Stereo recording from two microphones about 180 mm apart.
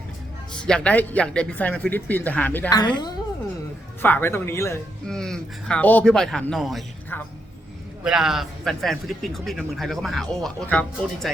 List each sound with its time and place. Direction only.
0.6 s speech: 5° left (ahead or behind)
2.6 s a woman's voice: 25° left (ahead or behind)
4.0 s speech: 10° left (ahead or behind)
5.0 s a man's voice: 5° left (ahead or behind)
8.0 s a man's voice: 5° right (ahead or behind)